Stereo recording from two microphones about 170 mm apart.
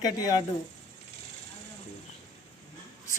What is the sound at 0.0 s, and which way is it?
Speech, 20° left (ahead or behind).